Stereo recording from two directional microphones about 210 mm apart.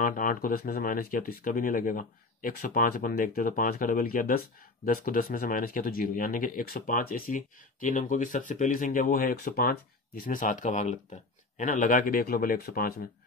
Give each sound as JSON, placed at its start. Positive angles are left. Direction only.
{"t": 0.0, "sound": "speech", "side_deg": 40}